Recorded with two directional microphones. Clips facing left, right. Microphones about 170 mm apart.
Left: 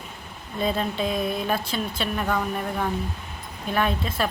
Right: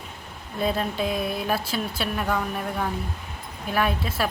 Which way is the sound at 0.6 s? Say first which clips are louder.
Even; 5° right (ahead or behind).